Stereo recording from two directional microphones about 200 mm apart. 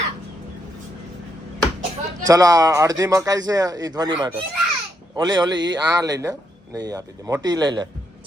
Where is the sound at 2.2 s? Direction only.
15° right (ahead or behind).